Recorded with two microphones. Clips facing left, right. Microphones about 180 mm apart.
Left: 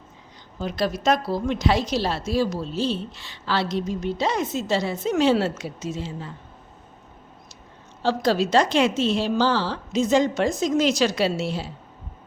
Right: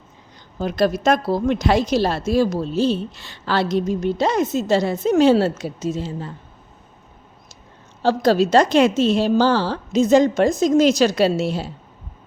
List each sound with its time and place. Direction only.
0.6 s a woman's voice: 50° right (ahead or behind)
8.0 s a woman's voice: 45° right (ahead or behind)